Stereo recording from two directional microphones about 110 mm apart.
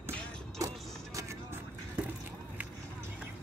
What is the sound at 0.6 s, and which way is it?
Vehicle, 30° right (ahead or behind).